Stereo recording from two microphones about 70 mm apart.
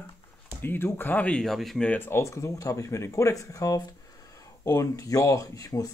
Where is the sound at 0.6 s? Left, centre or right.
Left.